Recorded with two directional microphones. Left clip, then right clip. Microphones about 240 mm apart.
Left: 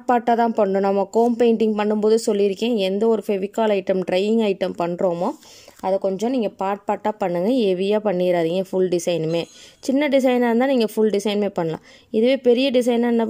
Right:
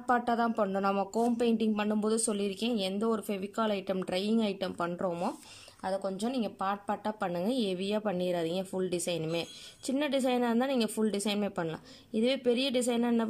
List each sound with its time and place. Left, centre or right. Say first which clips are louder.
0.0 s speech: left 11 dB; left